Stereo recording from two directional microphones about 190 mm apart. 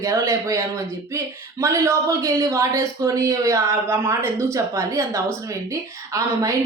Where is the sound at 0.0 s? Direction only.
15° right (ahead or behind).